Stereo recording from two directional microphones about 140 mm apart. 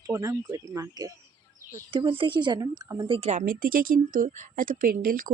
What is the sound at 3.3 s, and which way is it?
Speech, 75° right (ahead or behind).